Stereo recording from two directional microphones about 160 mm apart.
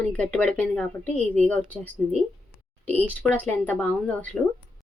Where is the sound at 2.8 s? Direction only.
10° left (ahead or behind).